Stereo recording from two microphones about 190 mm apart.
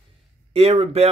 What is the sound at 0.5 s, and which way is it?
Speech, 35° right (ahead or behind).